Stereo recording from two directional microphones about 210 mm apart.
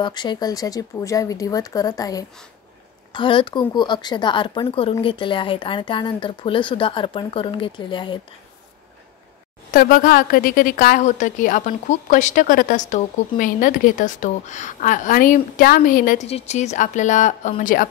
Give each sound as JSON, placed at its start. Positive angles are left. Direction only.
{"t": 0.0, "sound": "speech", "side_deg": 20}
{"t": 9.7, "sound": "a woman's voice", "side_deg": 40}
{"t": 16.3, "sound": "a woman's voice", "side_deg": 30}